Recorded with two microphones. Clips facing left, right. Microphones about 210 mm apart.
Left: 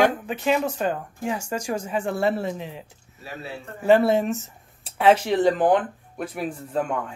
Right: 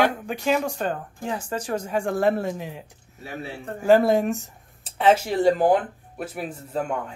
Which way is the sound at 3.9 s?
Centre (ahead or behind).